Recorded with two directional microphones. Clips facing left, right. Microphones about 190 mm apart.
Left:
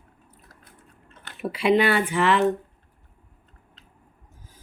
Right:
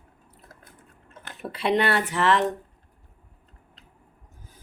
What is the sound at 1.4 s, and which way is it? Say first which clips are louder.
Speech: left 4 dB; 10° left (ahead or behind).